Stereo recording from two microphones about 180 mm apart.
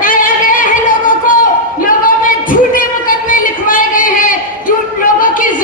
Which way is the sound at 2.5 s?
50° left (ahead or behind).